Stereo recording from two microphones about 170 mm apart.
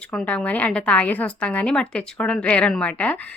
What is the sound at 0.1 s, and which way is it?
A woman's voice, 5° left (ahead or behind).